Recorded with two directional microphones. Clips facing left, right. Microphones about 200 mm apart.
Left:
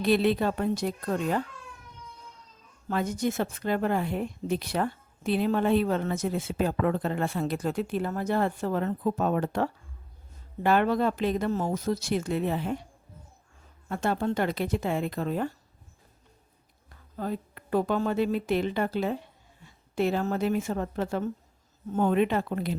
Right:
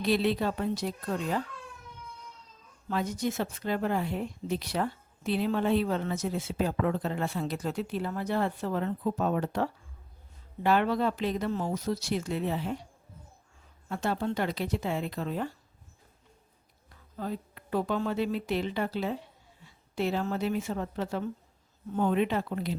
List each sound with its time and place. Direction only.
0.0 s speech: 55° left (ahead or behind)
2.9 s speech: 50° left (ahead or behind)
13.9 s speech: 50° left (ahead or behind)
17.2 s a woman's voice: 50° left (ahead or behind)